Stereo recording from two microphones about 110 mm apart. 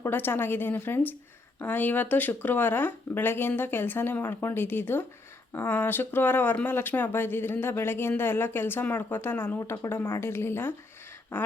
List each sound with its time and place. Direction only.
0.0 s speech: 20° left (ahead or behind)